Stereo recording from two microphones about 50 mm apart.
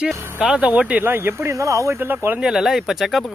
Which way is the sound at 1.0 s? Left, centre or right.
Right.